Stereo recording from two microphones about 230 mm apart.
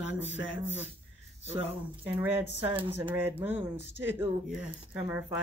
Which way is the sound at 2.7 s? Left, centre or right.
Right.